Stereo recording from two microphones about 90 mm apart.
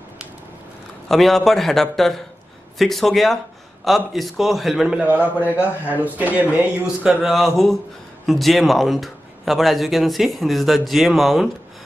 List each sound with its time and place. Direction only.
1.0 s a man's voice: 5° left (ahead or behind)
5.0 s a man's voice: 20° right (ahead or behind); by 11.5 s centre (ahead or behind)